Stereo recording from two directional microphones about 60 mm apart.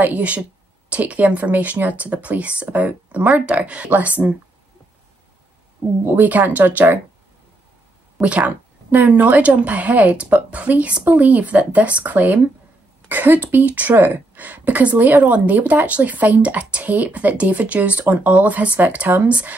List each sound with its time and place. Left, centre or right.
0.0 s speech: right
6.0 s speech: right
8.2 s speech: right